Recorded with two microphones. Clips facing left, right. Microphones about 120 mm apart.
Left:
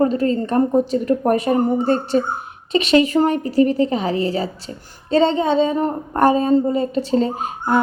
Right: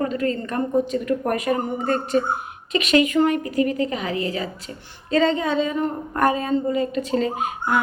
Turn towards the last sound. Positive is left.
turn(degrees=35)  # may be behind; listen again after turning